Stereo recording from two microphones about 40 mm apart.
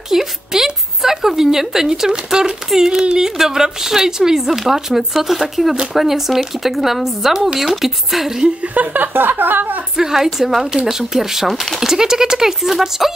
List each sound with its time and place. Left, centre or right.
0.1 s a woman's voice: centre
8.7 s speech: right
9.9 s a woman's voice: centre